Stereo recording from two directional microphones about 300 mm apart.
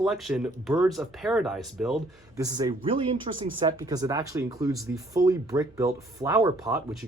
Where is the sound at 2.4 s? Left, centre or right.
Centre.